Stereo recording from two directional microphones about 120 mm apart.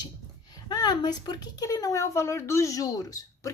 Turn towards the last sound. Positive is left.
turn(degrees=30)  # may be behind; listen again after turning